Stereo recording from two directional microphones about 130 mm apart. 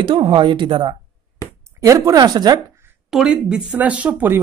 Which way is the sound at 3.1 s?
5° right (ahead or behind).